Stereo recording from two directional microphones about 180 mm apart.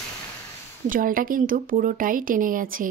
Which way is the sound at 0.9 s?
50° right (ahead or behind).